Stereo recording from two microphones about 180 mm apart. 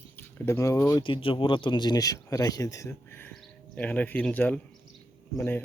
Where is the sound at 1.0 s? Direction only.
30° left (ahead or behind).